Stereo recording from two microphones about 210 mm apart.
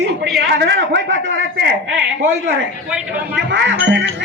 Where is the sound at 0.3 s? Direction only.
50° right (ahead or behind).